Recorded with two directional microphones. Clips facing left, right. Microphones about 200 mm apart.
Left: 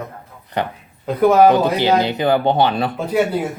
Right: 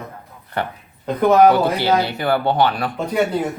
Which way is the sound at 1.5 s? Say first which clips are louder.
Left 1 dB; 20° left (ahead or behind).